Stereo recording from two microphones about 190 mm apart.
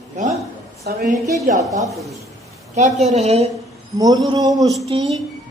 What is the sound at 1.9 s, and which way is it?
Speech, centre (ahead or behind).